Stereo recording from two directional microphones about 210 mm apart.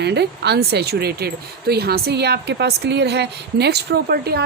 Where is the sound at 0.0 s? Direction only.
55° right (ahead or behind).